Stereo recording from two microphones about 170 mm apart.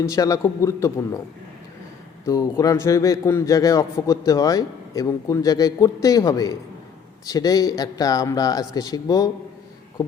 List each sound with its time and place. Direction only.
0.0 s a man's voice: 20° left (ahead or behind)
2.2 s a man's voice: 20° left (ahead or behind)